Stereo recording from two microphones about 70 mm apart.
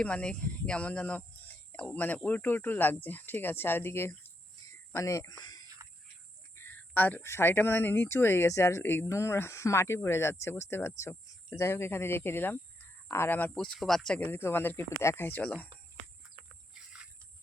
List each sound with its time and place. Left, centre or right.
0.0 s speech: centre; by 4.1 s left
4.9 s speech: left
5.4 s a sound: left
6.6 s a sound: left
7.3 s speech: left
7.5 s speech: left
8.4 s speech: left
8.8 s speech: left
9.0 s speech: left
13.5 s speech: centre
13.7 s speech: centre
14.3 s speech: left